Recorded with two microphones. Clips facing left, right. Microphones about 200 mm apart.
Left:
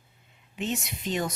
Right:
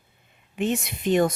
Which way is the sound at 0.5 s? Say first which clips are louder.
Right 6 dB; 55° right (ahead or behind).